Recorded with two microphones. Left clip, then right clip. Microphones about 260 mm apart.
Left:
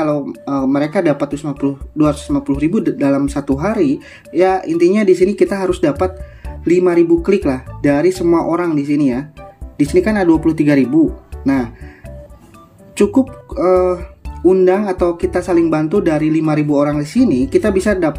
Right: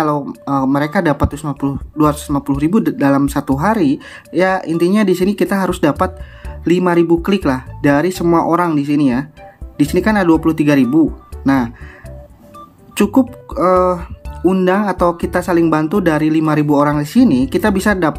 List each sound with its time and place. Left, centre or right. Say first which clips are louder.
0.5 s speech: right 1 dB; centre
13.5 s speech: even; centre